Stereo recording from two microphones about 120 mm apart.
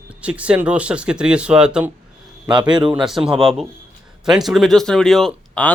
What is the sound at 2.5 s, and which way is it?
Speech, 40° right (ahead or behind).